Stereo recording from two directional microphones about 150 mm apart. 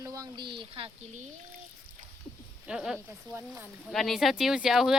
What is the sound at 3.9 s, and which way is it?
Speech, centre (ahead or behind).